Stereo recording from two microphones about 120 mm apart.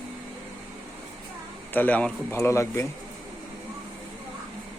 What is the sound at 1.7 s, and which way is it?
Speech, 15° left (ahead or behind).